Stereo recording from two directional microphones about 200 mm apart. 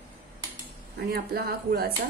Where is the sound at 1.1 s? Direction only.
50° right (ahead or behind).